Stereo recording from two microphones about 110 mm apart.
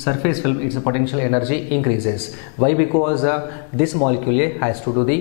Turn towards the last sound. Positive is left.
turn(degrees=10)  # may be behind; listen again after turning